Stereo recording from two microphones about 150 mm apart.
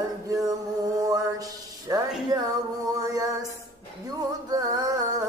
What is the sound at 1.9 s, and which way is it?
Music, 20° right (ahead or behind).